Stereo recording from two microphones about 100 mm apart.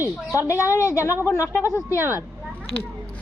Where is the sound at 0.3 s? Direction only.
30° left (ahead or behind).